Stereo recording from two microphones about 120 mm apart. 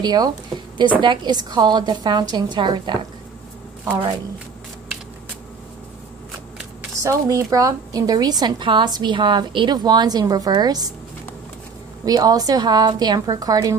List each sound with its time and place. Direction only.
0.0 s a woman's voice: 35° right (ahead or behind)
7.0 s a woman's voice: 25° right (ahead or behind)
12.0 s a woman's voice: 30° right (ahead or behind)